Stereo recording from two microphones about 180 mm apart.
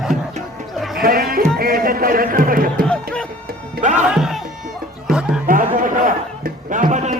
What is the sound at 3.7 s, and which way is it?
Music, 45° right (ahead or behind).